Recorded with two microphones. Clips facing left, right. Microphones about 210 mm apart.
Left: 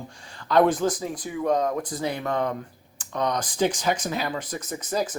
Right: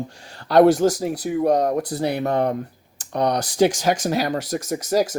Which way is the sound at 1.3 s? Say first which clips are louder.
Right 4 dB; 40° right (ahead or behind).